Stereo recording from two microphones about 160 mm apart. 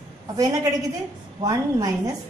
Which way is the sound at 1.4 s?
20° right (ahead or behind).